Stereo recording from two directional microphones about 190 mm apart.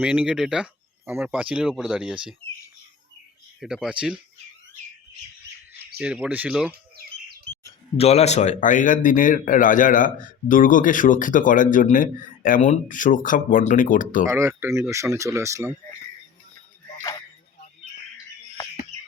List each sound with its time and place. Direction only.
0.0 s speech: 5° right (ahead or behind)
3.6 s speech: centre (ahead or behind)
6.0 s speech: 5° right (ahead or behind)
7.9 s speech: 35° left (ahead or behind)
14.3 s speech: 15° right (ahead or behind)
17.0 s music: 15° left (ahead or behind)